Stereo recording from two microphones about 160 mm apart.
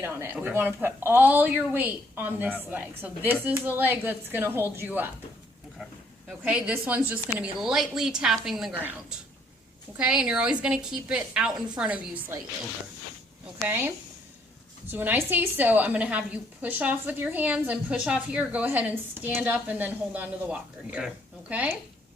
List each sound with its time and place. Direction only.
0.0 s a woman's voice: 15° right (ahead or behind)
6.2 s a woman's voice: 5° right (ahead or behind)
13.7 s a woman's voice: 15° right (ahead or behind)